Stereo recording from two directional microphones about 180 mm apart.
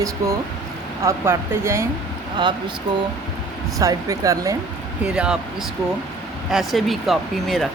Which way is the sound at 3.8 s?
20° right (ahead or behind).